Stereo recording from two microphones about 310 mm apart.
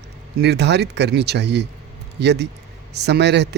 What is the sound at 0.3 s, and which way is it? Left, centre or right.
Speech, right.